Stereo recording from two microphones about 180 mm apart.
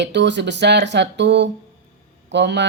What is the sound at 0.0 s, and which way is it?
Speech, 75° right (ahead or behind).